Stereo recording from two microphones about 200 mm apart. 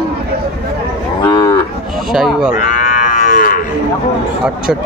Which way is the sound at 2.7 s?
40° left (ahead or behind).